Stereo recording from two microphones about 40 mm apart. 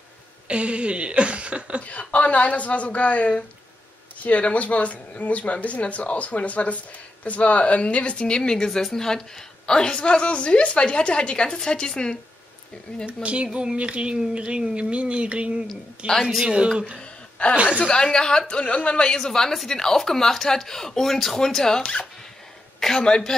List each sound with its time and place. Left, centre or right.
0.5 s a sound: right
1.8 s a woman's voice: left; by 12.2 s centre
13.0 s speech: right
17.0 s a sound: left
17.7 s speech: centre
19.1 s a man's voice: centre
23.0 s speech: left